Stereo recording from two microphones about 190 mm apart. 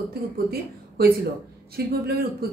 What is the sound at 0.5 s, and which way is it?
Speech, 55° right (ahead or behind).